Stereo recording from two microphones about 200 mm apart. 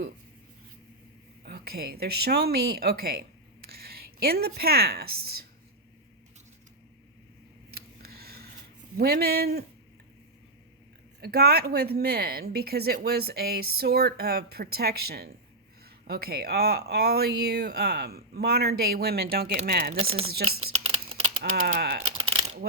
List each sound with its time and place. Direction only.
1.5 s a woman's voice: 50° right (ahead or behind)
7.7 s a sound: 50° right (ahead or behind)
9.0 s speech: 50° right (ahead or behind)
11.2 s speech: 50° right (ahead or behind)
20.0 s speech: 30° right (ahead or behind)
20.4 s speech: 90° right
21.5 s speech: 50° right (ahead or behind)
22.2 s a sound: 30° right (ahead or behind)